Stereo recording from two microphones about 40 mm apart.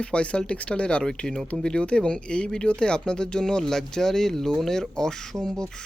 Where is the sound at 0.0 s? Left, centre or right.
Left.